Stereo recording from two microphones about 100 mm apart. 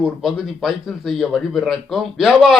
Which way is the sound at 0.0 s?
Centre (ahead or behind).